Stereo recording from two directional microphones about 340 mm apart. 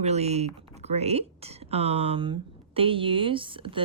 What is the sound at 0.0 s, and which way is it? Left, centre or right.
A woman's voice, centre.